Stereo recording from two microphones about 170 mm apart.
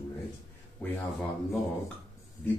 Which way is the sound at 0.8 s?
10° left (ahead or behind).